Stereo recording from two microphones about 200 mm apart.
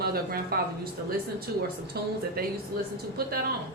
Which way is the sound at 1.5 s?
50° right (ahead or behind).